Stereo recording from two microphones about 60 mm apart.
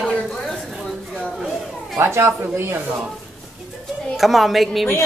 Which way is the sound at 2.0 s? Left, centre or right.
Right.